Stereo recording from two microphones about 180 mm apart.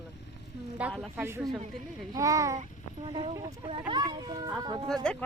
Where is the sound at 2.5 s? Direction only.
40° right (ahead or behind).